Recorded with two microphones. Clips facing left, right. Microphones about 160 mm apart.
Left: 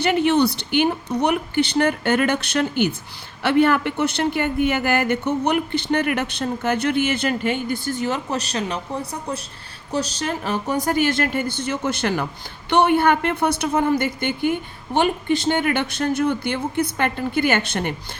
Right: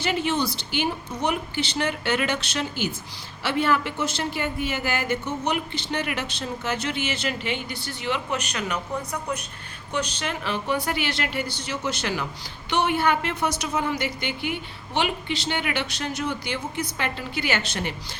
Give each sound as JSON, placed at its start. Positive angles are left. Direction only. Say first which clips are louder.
{"t": 0.0, "sound": "a woman's voice", "louder": "left 7 dB", "side_deg": 60}